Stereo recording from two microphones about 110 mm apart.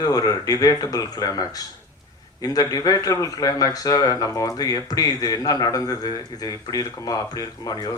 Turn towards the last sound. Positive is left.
turn(degrees=35)  # may be behind; listen again after turning